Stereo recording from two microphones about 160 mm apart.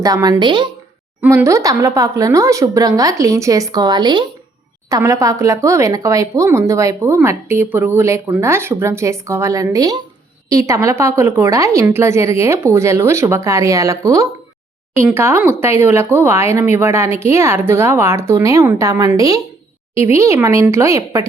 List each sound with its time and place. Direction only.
0.0 s speech: 20° right (ahead or behind)
1.2 s speech: 15° right (ahead or behind)